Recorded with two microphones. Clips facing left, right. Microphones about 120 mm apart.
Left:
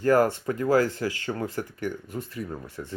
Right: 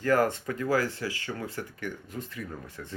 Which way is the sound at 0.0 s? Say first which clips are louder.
Left 4 dB; 35° left (ahead or behind).